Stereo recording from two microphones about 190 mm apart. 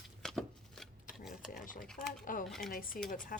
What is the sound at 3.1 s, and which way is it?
Speech, 45° left (ahead or behind).